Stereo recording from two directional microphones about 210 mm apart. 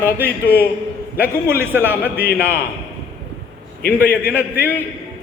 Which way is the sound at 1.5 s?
10° right (ahead or behind).